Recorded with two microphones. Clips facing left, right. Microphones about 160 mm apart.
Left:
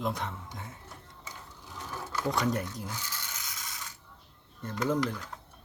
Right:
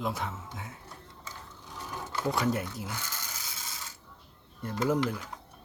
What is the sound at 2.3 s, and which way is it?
Speech, centre (ahead or behind).